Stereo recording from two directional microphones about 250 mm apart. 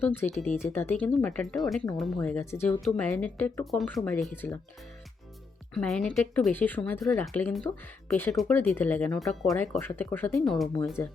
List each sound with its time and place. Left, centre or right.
0.0 s speech: centre
0.3 s speech: left
0.6 s speech: centre
5.7 s speech: centre